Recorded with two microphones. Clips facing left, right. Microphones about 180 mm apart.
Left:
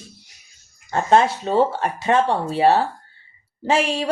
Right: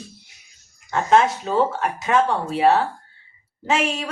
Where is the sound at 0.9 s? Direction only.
30° left (ahead or behind).